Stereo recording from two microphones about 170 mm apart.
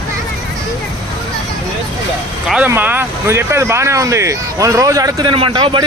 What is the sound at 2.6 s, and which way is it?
Speech, 10° right (ahead or behind).